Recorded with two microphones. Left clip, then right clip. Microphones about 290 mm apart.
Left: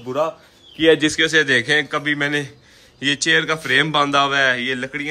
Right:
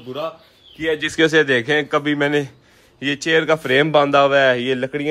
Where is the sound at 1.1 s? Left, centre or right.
Centre.